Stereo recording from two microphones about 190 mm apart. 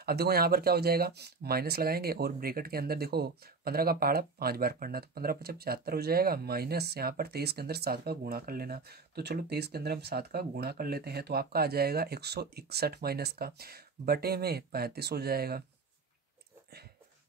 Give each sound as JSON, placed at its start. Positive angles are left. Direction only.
{"t": 0.0, "sound": "speech", "side_deg": -55}